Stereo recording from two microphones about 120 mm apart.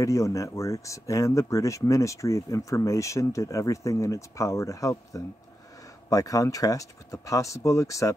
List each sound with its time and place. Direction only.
0.0 s speech: 25° left (ahead or behind)